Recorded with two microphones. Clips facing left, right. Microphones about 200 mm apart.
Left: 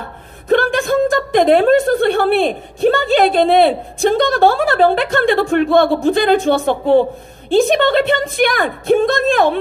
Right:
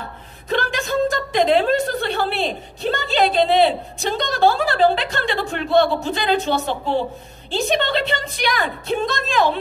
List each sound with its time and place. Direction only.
0.5 s a woman's voice: 50° left (ahead or behind)